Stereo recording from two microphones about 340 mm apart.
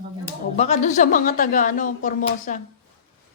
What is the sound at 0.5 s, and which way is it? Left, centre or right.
Speech, centre.